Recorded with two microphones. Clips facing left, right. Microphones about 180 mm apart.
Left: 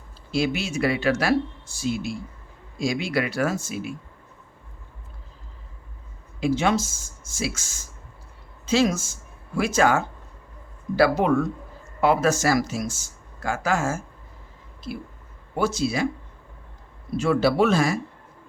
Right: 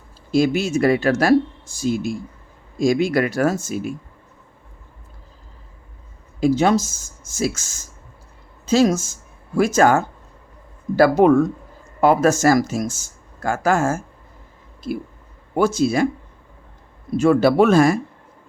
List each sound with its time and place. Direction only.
0.3 s speech: 45° right (ahead or behind)
6.4 s speech: 40° right (ahead or behind)
15.5 s speech: 50° right (ahead or behind)
17.2 s speech: 50° right (ahead or behind)